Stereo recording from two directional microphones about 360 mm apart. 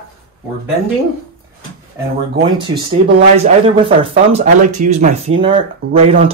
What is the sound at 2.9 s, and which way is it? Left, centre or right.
Speech, centre.